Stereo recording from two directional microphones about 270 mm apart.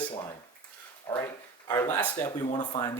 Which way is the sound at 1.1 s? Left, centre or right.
Centre.